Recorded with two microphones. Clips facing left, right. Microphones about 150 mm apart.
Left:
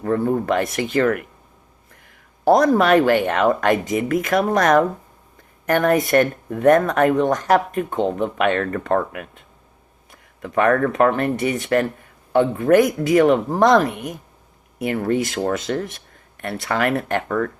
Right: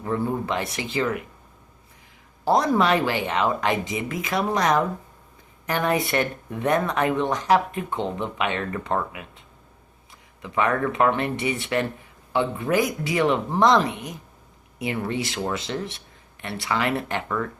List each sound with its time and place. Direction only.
0.0 s speech: 50° left (ahead or behind)
2.4 s speech: 50° left (ahead or behind)